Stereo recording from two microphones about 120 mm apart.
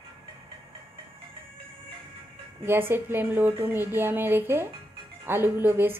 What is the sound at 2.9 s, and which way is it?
A woman's voice, 20° right (ahead or behind).